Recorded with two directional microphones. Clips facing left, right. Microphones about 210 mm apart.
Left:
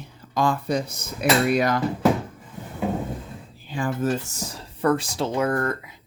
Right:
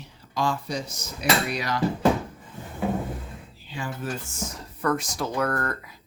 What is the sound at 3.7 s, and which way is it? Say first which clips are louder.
Speech: left 8 dB; 50° left (ahead or behind).